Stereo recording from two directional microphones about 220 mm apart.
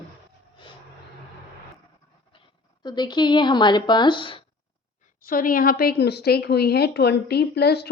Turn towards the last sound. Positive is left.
turn(degrees=45)  # may be behind; listen again after turning